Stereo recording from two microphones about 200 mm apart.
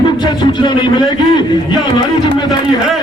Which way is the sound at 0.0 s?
20° left (ahead or behind).